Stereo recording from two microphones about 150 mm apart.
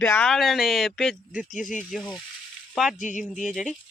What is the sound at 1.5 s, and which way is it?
Speech, 55° left (ahead or behind).